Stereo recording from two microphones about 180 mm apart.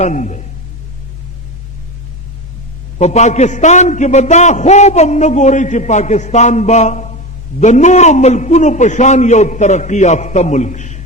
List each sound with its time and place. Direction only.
0.0 s a man's voice: 40° left (ahead or behind)
3.0 s a man's voice: 40° left (ahead or behind)